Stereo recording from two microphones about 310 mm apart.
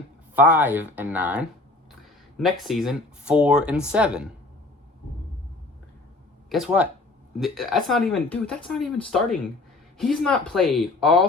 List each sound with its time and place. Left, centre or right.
0.3 s speech: centre
6.5 s speech: centre